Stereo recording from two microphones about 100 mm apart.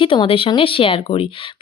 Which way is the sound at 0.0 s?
65° left (ahead or behind).